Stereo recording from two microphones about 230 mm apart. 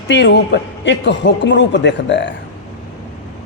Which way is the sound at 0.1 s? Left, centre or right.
Left.